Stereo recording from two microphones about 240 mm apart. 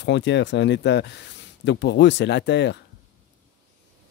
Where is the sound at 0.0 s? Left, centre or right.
Left.